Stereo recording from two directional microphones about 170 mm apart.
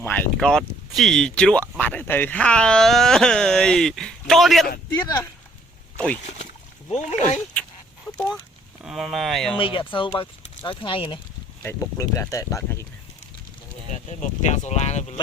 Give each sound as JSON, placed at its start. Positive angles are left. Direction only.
{"t": 0.0, "sound": "speech", "side_deg": 10}
{"t": 5.0, "sound": "speech", "side_deg": 20}
{"t": 6.9, "sound": "speech", "side_deg": 45}
{"t": 8.0, "sound": "a sound", "side_deg": 5}
{"t": 8.8, "sound": "speech", "side_deg": 0}
{"t": 9.6, "sound": "speech", "side_deg": 30}
{"t": 11.6, "sound": "speech", "side_deg": 15}
{"t": 14.1, "sound": "speech", "side_deg": 45}